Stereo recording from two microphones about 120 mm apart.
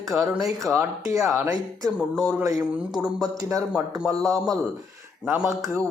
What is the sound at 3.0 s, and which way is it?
Speech, 5° right (ahead or behind).